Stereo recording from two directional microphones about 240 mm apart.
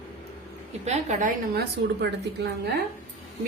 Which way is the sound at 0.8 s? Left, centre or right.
Right.